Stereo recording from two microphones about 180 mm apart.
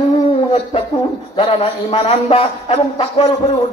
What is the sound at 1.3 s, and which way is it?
A man's voice, 30° left (ahead or behind).